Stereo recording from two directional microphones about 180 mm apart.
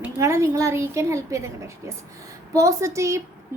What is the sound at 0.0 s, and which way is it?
A woman's voice, 15° right (ahead or behind).